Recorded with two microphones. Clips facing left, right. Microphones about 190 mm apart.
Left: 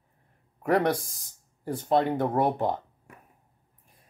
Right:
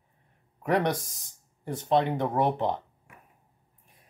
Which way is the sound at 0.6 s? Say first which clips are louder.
Left 2 dB; centre (ahead or behind).